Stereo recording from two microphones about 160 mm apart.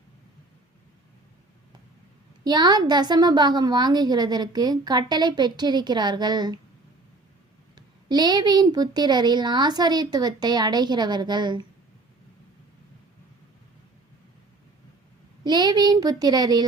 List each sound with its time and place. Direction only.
2.4 s a woman's voice: 25° right (ahead or behind)
7.8 s a woman's voice: 25° right (ahead or behind)
15.4 s a woman's voice: 25° right (ahead or behind)